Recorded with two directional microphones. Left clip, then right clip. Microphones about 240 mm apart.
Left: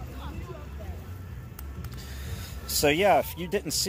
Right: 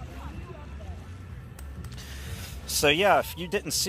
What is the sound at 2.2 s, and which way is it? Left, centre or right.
Speech, centre.